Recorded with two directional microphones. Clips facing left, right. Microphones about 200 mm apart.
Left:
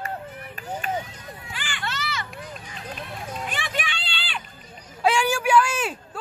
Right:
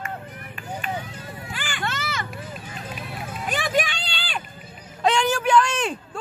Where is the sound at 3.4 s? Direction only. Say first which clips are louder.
Right 10 dB; 40° right (ahead or behind).